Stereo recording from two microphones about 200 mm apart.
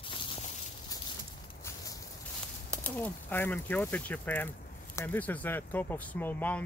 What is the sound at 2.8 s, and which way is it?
Speech, 10° left (ahead or behind).